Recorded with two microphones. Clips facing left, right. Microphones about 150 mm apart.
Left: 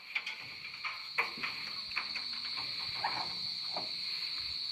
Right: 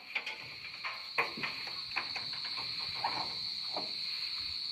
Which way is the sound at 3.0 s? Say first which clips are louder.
Right 1 dB; 15° right (ahead or behind).